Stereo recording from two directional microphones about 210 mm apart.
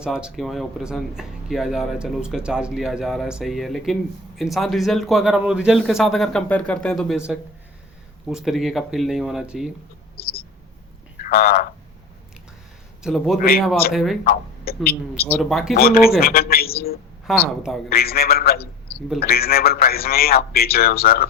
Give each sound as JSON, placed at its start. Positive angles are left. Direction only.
{"t": 0.0, "sound": "speech", "side_deg": -5}
{"t": 11.2, "sound": "speech", "side_deg": 45}
{"t": 13.0, "sound": "a man's voice", "side_deg": 0}
{"t": 14.3, "sound": "a sound", "side_deg": 45}
{"t": 15.3, "sound": "speech", "side_deg": 0}
{"t": 15.7, "sound": "a man's voice", "side_deg": 45}
{"t": 17.3, "sound": "speech", "side_deg": 0}
{"t": 17.8, "sound": "a man's voice", "side_deg": 45}